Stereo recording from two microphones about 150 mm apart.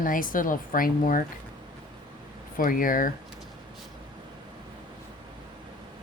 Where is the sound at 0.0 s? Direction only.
65° left (ahead or behind).